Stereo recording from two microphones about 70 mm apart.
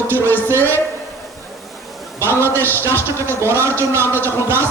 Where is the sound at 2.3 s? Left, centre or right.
Left.